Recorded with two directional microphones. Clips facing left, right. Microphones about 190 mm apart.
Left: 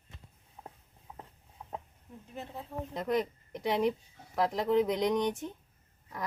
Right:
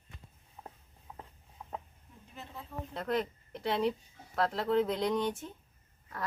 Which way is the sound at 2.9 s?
15° left (ahead or behind).